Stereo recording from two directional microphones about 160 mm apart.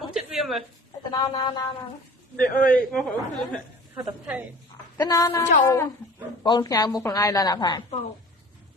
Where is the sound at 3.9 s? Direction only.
10° right (ahead or behind).